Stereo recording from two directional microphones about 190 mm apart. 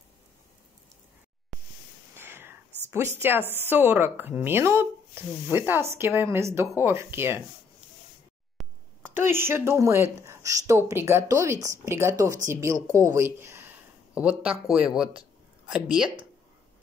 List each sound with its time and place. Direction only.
2.1 s whispering: 10° right (ahead or behind)
2.9 s speech: 15° right (ahead or behind)
8.6 s a sound: centre (ahead or behind)
9.1 s speech: 10° right (ahead or behind)
10.2 s a sound: 15° right (ahead or behind)
10.7 s speech: 15° right (ahead or behind)